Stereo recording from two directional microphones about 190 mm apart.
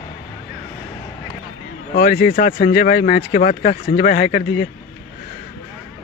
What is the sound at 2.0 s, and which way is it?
Speech, 45° left (ahead or behind).